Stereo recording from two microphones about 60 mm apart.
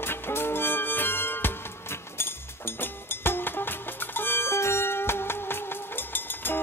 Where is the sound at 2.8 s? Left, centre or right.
Left.